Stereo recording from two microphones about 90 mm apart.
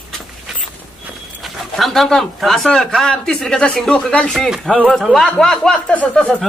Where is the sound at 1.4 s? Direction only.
Centre (ahead or behind).